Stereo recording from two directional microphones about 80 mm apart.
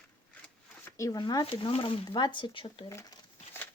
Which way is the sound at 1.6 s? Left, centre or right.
Left.